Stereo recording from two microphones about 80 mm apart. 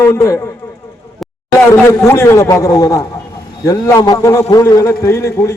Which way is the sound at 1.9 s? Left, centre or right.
Left.